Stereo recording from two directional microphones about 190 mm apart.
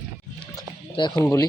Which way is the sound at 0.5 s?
25° left (ahead or behind).